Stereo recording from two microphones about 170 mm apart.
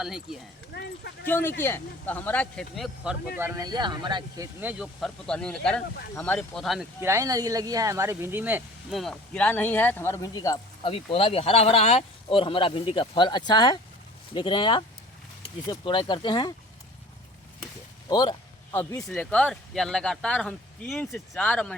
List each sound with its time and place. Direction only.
0.0 s speech: 5° right (ahead or behind)
0.7 s speech: 75° left (ahead or behind)
1.3 s speech: 10° left (ahead or behind)
3.3 s speech: 15° right (ahead or behind)
4.6 s speech: 5° right (ahead or behind)
7.0 s speech: 15° right (ahead or behind)
8.9 s speech: centre (ahead or behind); by 10.9 s 20° left (ahead or behind)
10.9 s speech: 35° left (ahead or behind)
18.1 s speech: 25° left (ahead or behind); by 21.8 s 5° left (ahead or behind)